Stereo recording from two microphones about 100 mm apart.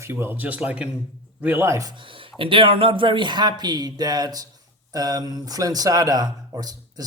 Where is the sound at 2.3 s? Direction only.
60° right (ahead or behind).